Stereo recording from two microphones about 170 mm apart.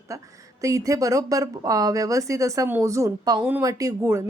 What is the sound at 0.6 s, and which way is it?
A woman's voice, 20° right (ahead or behind).